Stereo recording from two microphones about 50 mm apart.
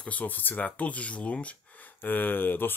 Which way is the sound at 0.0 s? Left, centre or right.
Left.